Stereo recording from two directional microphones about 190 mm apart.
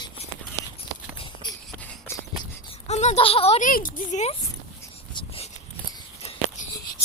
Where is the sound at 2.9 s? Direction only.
35° left (ahead or behind).